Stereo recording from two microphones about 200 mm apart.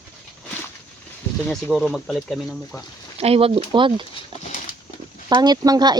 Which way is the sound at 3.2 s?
30° right (ahead or behind).